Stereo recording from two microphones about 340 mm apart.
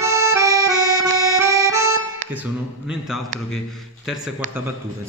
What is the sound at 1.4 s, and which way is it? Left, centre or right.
Accordion, centre.